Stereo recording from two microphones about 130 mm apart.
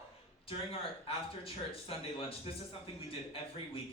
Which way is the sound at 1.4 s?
45° left (ahead or behind).